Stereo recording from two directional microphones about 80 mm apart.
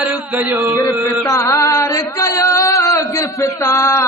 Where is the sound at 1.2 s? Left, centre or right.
Left.